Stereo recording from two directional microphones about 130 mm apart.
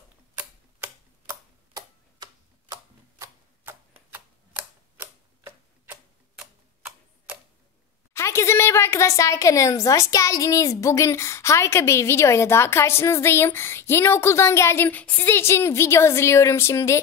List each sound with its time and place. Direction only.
1.3 s a sound: 30° right (ahead or behind)
2.7 s tick-tock: 20° right (ahead or behind)
8.1 s a woman's voice: 20° left (ahead or behind)